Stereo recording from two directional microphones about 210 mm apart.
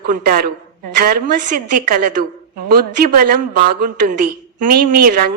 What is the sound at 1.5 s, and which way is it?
Speech, 40° right (ahead or behind).